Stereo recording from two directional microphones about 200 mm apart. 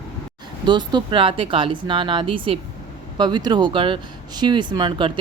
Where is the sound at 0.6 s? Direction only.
20° right (ahead or behind).